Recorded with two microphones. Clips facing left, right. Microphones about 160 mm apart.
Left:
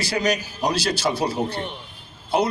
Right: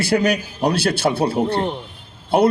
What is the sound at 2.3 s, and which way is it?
Speech, 55° right (ahead or behind).